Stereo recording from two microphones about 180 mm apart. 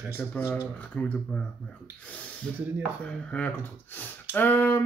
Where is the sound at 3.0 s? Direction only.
10° left (ahead or behind).